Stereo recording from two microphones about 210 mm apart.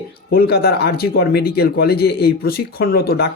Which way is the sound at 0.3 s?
50° left (ahead or behind).